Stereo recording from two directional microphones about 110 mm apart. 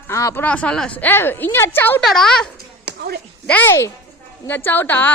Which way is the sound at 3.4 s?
15° left (ahead or behind).